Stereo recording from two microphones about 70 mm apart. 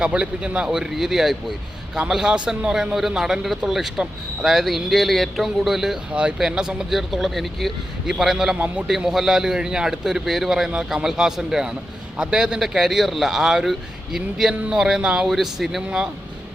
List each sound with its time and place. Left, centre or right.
0.0 s a man's voice: centre
6.1 s speech: centre
8.5 s a man's voice: right
9.0 s a man's voice: centre